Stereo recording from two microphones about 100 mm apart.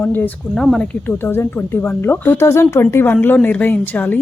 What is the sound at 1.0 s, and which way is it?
A woman's voice, 20° left (ahead or behind).